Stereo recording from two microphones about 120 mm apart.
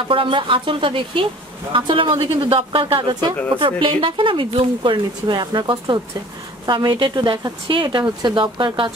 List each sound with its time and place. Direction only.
0.1 s a woman's voice: 45° right (ahead or behind)